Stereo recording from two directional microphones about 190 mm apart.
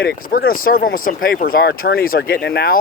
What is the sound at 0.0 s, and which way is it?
Speech, 50° left (ahead or behind).